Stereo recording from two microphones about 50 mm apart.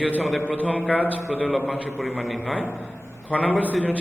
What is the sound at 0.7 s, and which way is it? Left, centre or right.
Speech, left.